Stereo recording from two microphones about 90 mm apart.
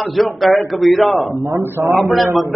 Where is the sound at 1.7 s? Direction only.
25° right (ahead or behind).